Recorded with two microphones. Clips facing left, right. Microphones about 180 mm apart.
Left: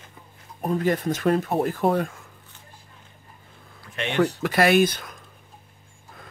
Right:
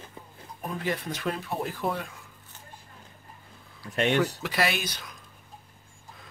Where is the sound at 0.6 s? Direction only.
45° left (ahead or behind).